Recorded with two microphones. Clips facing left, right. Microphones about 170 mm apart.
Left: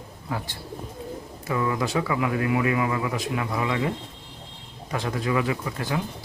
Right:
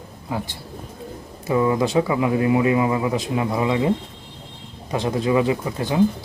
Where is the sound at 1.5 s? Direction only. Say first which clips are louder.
Right 7 dB; 25° right (ahead or behind).